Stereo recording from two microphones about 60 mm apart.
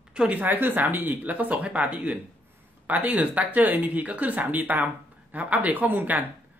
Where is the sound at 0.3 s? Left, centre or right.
Right.